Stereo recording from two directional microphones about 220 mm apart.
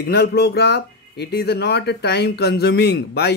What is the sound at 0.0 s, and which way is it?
Speech, 45° left (ahead or behind).